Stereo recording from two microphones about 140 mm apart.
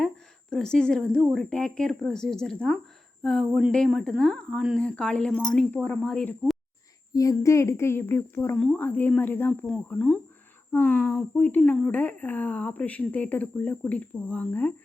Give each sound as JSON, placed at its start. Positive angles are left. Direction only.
{"t": 0.5, "sound": "speech", "side_deg": 5}
{"t": 7.1, "sound": "speech", "side_deg": 25}
{"t": 8.5, "sound": "speech", "side_deg": 5}